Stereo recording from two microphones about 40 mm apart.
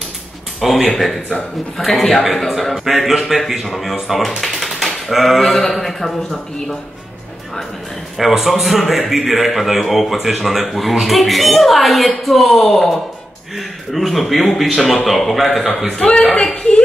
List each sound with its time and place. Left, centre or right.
0.6 s a man's voice: centre
4.6 s typewriter: centre
5.4 s a man's voice: centre
8.2 s a man's voice: centre
16.0 s a man's voice: centre
16.5 s a sound: left